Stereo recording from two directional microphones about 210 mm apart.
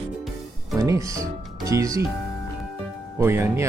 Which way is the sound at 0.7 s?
15° right (ahead or behind).